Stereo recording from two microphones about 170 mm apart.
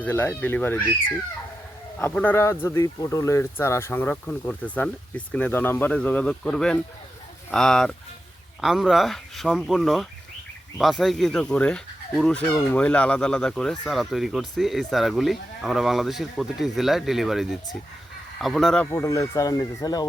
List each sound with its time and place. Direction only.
0.0 s speech: 10° left (ahead or behind)
2.0 s speech: 10° left (ahead or behind)
18.9 s speech: 15° left (ahead or behind)